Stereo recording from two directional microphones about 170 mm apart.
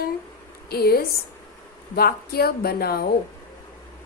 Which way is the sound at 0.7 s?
65° left (ahead or behind).